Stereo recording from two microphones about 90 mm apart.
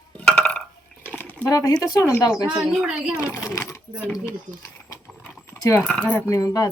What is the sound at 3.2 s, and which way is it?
Speech, 35° left (ahead or behind).